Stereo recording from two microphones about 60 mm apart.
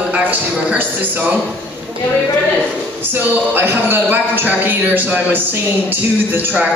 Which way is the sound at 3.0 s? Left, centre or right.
Right.